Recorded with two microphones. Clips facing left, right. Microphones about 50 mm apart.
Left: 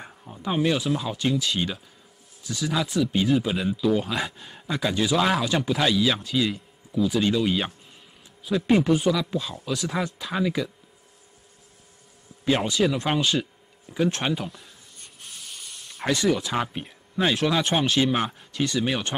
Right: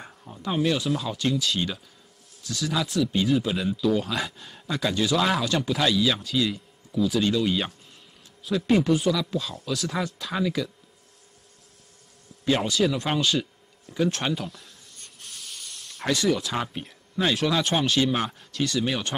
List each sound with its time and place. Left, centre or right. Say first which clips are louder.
0.0 s speech: left 1 dB; centre
12.4 s speech: left 1 dB; centre
12.8 s a sound: left 2 dB; centre
17.5 s speech: left 1 dB; centre